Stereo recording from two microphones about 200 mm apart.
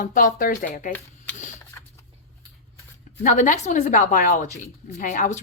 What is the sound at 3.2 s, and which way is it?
A woman's voice, 35° left (ahead or behind).